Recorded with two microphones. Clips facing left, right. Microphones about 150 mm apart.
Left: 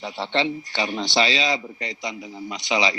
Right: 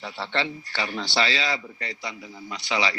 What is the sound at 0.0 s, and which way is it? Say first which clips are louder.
A man's voice: left 4 dB; 20° left (ahead or behind).